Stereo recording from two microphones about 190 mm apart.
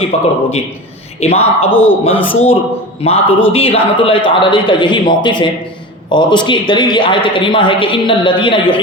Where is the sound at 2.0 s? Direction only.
30° left (ahead or behind).